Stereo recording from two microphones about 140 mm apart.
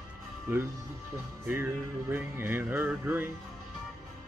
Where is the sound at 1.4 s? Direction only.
15° right (ahead or behind).